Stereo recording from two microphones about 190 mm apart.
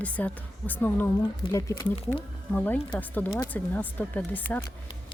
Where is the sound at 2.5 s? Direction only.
10° left (ahead or behind).